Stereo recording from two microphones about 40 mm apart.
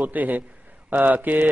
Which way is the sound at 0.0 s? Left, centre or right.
Right.